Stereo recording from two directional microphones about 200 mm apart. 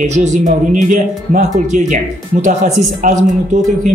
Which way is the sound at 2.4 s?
40° right (ahead or behind).